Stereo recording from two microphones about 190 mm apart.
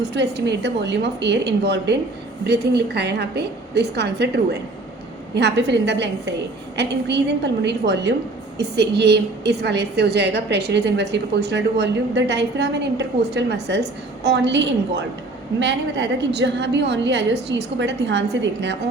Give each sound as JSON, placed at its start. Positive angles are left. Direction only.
{"t": 0.1, "sound": "a woman's voice", "side_deg": -65}